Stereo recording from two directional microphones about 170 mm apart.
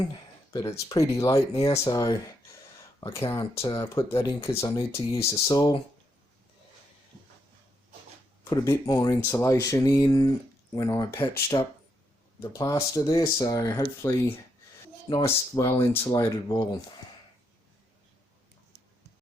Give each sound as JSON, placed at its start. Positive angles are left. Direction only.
{"t": 0.0, "sound": "speech", "side_deg": 25}
{"t": 8.4, "sound": "speech", "side_deg": 20}